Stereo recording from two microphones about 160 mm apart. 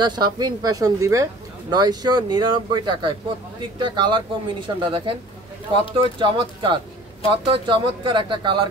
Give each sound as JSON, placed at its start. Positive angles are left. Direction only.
{"t": 0.0, "sound": "speech", "side_deg": -25}
{"t": 6.1, "sound": "speech", "side_deg": -30}